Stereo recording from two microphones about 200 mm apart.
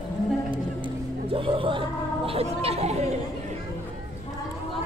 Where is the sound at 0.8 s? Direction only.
25° right (ahead or behind).